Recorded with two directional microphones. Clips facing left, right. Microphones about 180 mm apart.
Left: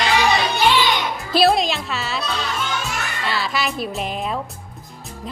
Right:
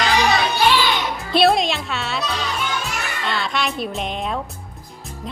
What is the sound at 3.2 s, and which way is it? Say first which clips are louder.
A woman's voice: even; 5° left (ahead or behind).